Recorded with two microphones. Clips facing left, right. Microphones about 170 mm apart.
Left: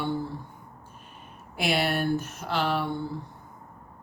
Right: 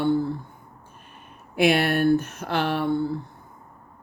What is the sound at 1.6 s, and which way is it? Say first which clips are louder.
Speech: right 6 dB; 55° right (ahead or behind).